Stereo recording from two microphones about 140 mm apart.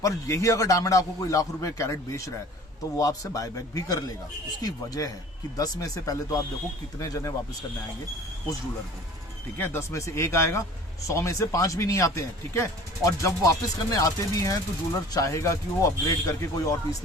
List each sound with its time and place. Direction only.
0.0 s a man's voice: 20° left (ahead or behind)
9.6 s a man's voice: 15° left (ahead or behind)